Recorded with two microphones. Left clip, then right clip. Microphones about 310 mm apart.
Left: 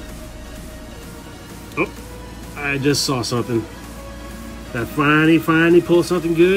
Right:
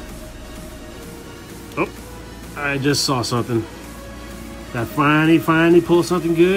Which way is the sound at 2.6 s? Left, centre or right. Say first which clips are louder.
Even; centre.